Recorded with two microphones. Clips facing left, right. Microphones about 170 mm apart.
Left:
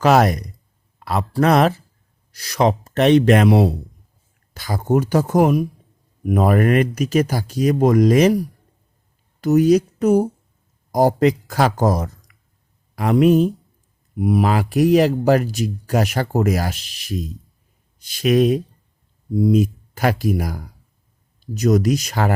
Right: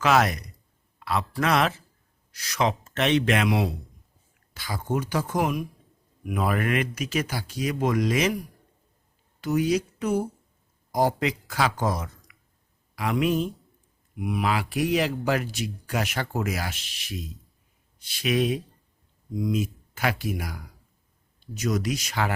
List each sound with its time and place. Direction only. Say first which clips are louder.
0.0 s a man's voice: left 7 dB; 40° left (ahead or behind)